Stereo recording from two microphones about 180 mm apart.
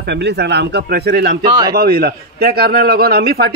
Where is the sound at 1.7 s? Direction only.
60° right (ahead or behind).